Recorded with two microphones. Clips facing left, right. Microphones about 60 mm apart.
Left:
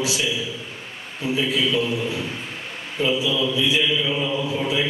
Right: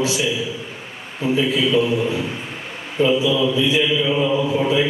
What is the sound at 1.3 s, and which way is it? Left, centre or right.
Mantra, centre.